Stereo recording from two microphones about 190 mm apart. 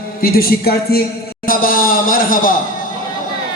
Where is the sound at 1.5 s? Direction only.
50° left (ahead or behind).